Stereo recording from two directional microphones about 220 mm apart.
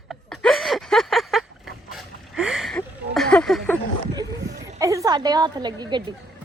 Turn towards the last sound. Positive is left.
turn(degrees=-20)  # may be behind; listen again after turning